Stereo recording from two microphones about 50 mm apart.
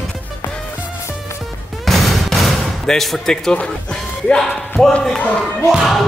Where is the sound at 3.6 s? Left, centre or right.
Left.